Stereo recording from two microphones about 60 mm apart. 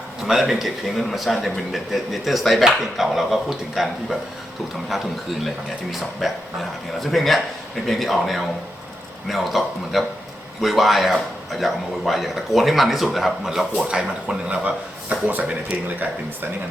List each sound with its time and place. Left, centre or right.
0.3 s speech: centre
5.9 s speech: centre
14.4 s speech: right
15.7 s speech: right